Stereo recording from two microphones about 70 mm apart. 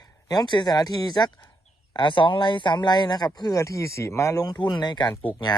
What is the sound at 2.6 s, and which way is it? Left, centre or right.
Speech, left.